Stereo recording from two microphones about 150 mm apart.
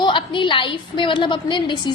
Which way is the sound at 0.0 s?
30° left (ahead or behind).